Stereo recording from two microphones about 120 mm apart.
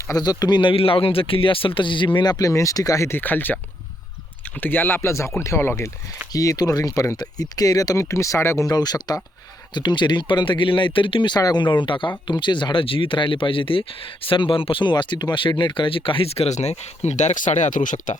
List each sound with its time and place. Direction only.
0.1 s speech: 35° left (ahead or behind); by 3.6 s 15° left (ahead or behind)
4.6 s speech: 15° left (ahead or behind); by 18.2 s 90° left